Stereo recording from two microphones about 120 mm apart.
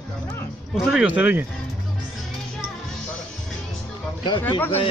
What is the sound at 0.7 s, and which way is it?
Speech, 5° right (ahead or behind).